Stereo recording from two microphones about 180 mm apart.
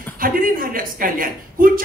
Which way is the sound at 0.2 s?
50° right (ahead or behind).